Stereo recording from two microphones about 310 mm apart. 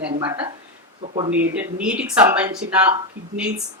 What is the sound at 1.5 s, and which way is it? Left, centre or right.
Speech, centre.